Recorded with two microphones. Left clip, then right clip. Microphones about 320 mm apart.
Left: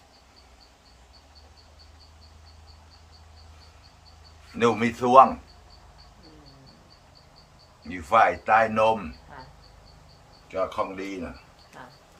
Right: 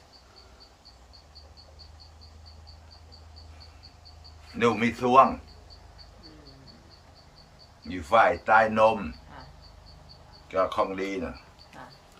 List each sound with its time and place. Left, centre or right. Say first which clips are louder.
4.5 s speech: left 2 dB; centre
7.9 s speech: left 1 dB; centre
9.3 s insect: left 3 dB; centre
10.5 s speech: right 2 dB; centre
11.8 s duck: left 1 dB; centre